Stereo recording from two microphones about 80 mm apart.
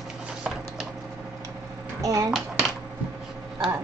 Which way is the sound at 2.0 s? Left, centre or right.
Right.